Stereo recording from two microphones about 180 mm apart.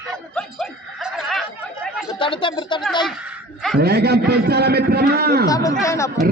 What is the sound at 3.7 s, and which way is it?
A man's voice, 60° right (ahead or behind).